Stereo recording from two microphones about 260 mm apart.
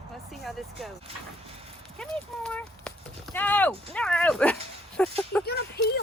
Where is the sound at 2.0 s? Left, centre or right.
Centre.